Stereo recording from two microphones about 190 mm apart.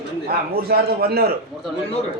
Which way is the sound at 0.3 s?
55° right (ahead or behind).